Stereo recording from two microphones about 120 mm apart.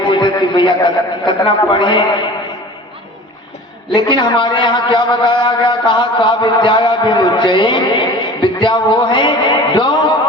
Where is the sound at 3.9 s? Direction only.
40° left (ahead or behind).